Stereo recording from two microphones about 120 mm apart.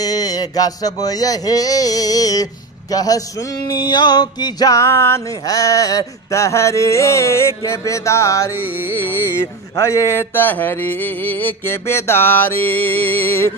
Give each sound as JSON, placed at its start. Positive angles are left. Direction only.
{"t": 0.0, "sound": "a sound", "side_deg": 30}
{"t": 8.5, "sound": "music", "side_deg": -15}
{"t": 9.8, "sound": "mantra", "side_deg": 25}